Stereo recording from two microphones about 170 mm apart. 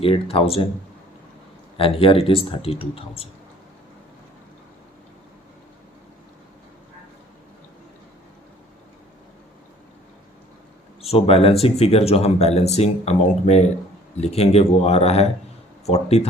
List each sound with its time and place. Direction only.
0.0 s speech: 35° left (ahead or behind)
1.8 s speech: 35° left (ahead or behind)
11.0 s speech: 35° left (ahead or behind)